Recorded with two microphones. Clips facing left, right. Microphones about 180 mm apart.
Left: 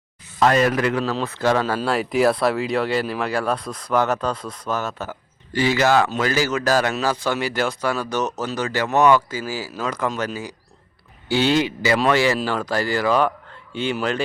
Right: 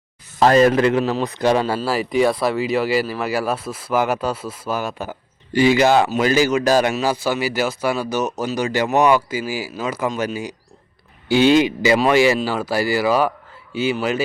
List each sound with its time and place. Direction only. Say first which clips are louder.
0.3 s a man's voice: right 4 dB; 30° right (ahead or behind); by 14.3 s 5° right (ahead or behind)